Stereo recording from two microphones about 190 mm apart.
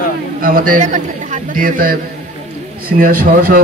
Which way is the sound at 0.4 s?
50° right (ahead or behind).